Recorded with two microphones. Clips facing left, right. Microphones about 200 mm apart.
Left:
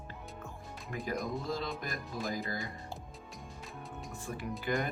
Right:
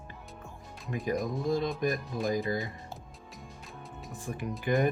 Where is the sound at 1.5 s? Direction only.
15° right (ahead or behind).